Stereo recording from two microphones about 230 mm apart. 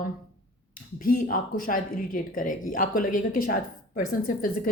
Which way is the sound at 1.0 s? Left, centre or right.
Left.